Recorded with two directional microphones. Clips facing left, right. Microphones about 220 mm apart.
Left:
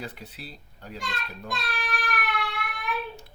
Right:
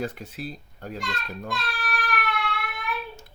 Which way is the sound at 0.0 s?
45° right (ahead or behind).